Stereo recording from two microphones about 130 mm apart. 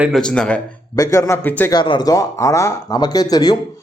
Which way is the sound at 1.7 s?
35° left (ahead or behind).